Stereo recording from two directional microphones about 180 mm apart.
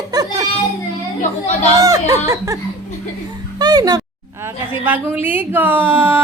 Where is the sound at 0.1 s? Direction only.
20° right (ahead or behind).